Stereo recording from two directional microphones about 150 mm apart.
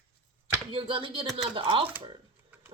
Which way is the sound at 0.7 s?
35° right (ahead or behind).